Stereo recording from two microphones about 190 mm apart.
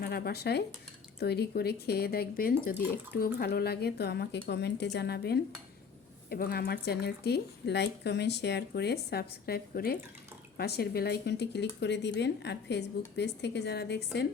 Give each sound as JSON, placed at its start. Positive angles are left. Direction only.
{"t": 0.0, "sound": "speech", "side_deg": 55}